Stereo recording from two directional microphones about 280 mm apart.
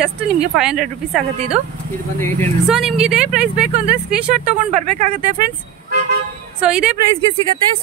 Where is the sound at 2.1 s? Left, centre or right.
Centre.